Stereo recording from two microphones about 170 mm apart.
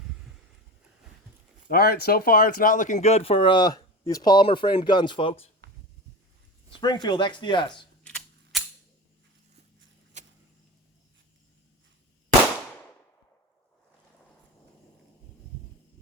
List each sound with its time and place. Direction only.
1.6 s speech: 65° left (ahead or behind); by 5.5 s 35° left (ahead or behind)
6.7 s speech: 30° left (ahead or behind)
8.0 s typewriter: 5° left (ahead or behind)
10.1 s a sound: 45° right (ahead or behind)